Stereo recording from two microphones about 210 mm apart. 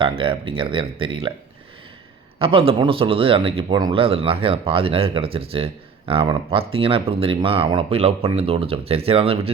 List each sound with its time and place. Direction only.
0.0 s speech: 25° right (ahead or behind)
2.4 s speech: 25° right (ahead or behind)